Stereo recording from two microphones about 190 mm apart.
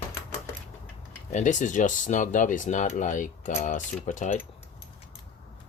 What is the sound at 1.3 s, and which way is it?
Speech, 40° left (ahead or behind).